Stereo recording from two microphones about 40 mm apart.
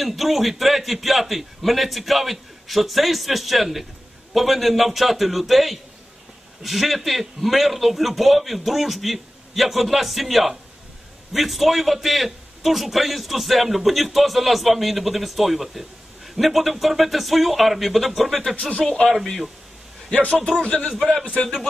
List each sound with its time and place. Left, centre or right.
0.0 s a man's voice: centre
18.7 s speech: left
20.6 s speech: left